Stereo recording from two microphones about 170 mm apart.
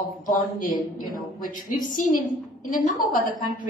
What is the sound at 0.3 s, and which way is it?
A woman's voice, 55° left (ahead or behind).